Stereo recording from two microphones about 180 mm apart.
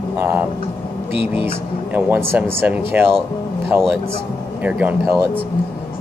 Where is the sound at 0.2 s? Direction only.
10° right (ahead or behind).